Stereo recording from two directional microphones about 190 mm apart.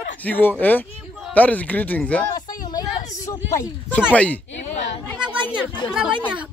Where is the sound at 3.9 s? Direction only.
5° left (ahead or behind).